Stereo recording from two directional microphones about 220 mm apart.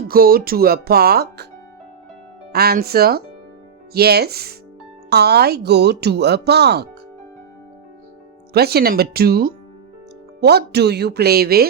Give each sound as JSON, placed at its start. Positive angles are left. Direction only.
{"t": 0.1, "sound": "speech", "side_deg": -45}
{"t": 2.5, "sound": "speech", "side_deg": -45}
{"t": 8.5, "sound": "speech", "side_deg": -45}